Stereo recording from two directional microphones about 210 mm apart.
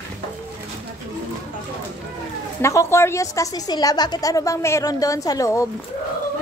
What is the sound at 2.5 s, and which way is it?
A woman's voice, 10° left (ahead or behind).